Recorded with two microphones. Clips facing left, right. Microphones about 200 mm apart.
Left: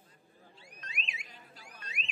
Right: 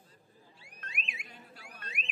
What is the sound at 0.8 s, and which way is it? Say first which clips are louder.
Alarm: right 1 dB; 55° right (ahead or behind).